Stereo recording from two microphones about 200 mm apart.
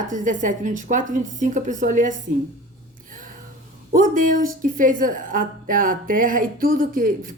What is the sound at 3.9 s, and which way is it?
A woman's voice, 40° right (ahead or behind).